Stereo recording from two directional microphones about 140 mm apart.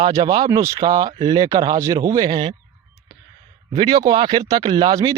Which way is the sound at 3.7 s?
30° right (ahead or behind).